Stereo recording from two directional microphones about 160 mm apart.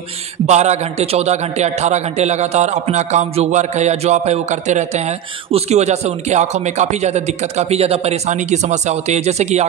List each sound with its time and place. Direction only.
0.5 s a man's voice: 45° right (ahead or behind)